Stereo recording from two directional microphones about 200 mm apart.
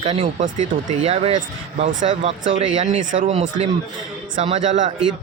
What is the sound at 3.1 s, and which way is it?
Speech, 35° right (ahead or behind).